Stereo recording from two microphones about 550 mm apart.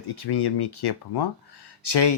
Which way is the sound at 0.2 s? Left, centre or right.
Left.